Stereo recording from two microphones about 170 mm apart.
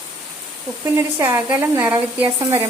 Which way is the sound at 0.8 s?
15° right (ahead or behind).